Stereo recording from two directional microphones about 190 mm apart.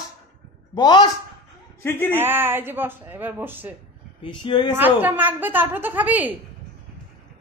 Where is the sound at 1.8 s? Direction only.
10° left (ahead or behind).